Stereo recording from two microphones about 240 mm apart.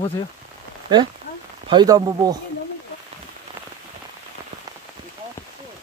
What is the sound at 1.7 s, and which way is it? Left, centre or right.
Speech, centre.